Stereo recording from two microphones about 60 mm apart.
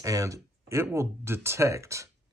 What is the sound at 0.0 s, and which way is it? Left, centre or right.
Speech, right.